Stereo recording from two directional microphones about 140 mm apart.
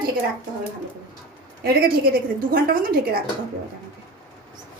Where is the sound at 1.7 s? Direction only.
90° right.